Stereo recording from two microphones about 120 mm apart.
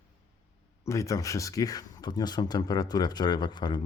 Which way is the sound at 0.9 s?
25° left (ahead or behind).